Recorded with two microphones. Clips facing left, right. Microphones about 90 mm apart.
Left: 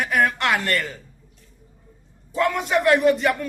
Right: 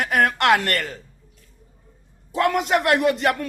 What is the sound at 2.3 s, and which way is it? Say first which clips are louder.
A man's voice: right 1 dB; 65° right (ahead or behind).